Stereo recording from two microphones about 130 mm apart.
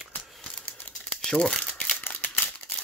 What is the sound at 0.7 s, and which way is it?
Crumpling, 10° left (ahead or behind).